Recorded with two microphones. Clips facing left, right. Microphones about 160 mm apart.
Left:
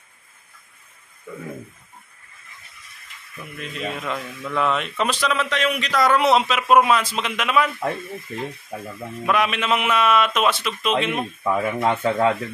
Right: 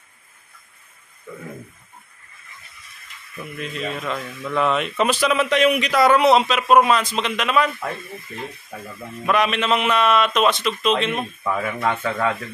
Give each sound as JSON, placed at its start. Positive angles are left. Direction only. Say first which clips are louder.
{"t": 3.6, "sound": "a man's voice", "louder": "right 1 dB", "side_deg": 5}
{"t": 4.4, "sound": "speech", "louder": "right 2 dB", "side_deg": -5}
{"t": 8.7, "sound": "speech", "louder": "left 3 dB", "side_deg": 20}
{"t": 9.2, "sound": "a man's voice", "louder": "right 2 dB", "side_deg": 5}
{"t": 11.5, "sound": "speech", "louder": "left 2 dB", "side_deg": 25}